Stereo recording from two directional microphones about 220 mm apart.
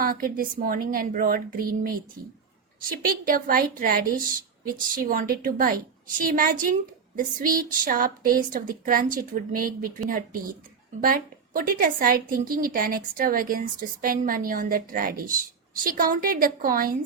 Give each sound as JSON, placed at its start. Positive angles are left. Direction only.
{"t": 0.0, "sound": "speech", "side_deg": -40}
{"t": 3.1, "sound": "speech", "side_deg": -40}